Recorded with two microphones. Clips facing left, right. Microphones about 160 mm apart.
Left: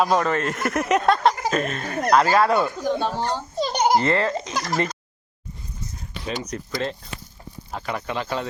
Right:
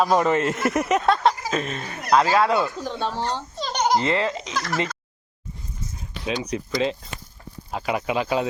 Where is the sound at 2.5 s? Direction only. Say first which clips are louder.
Left 3 dB; 15° left (ahead or behind).